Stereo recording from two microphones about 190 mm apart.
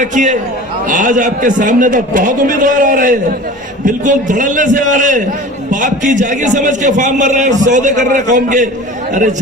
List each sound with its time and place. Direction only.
0.0 s a man's voice: 40° right (ahead or behind)